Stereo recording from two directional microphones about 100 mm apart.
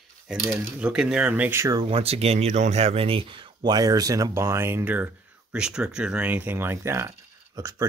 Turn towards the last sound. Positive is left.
turn(degrees=-35)  # may be behind; listen again after turning